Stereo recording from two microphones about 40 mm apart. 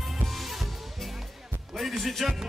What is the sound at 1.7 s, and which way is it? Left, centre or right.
Music, centre.